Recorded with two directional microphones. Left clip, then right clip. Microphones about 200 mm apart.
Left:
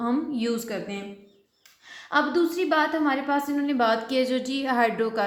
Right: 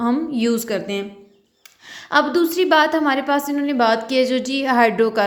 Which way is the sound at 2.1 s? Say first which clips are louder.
Right 6 dB; 40° right (ahead or behind).